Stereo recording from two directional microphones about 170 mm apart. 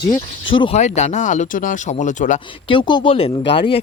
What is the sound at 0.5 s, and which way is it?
Speech, 30° left (ahead or behind).